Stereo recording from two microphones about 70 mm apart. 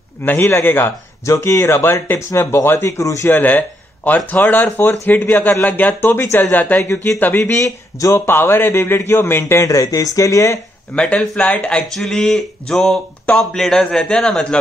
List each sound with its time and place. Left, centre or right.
0.2 s a man's voice: left
3.3 s speech: left
6.8 s a man's voice: left
7.5 s speech: left
8.3 s a man's voice: left
9.6 s speech: left
11.0 s a man's voice: centre
11.9 s a sound: centre
13.4 s a man's voice: centre